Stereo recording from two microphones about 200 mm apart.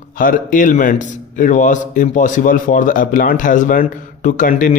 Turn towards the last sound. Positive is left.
turn(degrees=40)  # may be behind; listen again after turning